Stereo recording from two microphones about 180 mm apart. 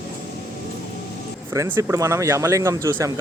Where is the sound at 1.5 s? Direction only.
15° right (ahead or behind).